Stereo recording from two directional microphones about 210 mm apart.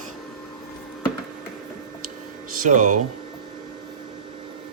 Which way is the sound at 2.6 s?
35° right (ahead or behind).